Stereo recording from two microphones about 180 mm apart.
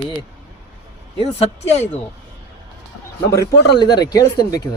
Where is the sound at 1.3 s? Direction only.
35° left (ahead or behind).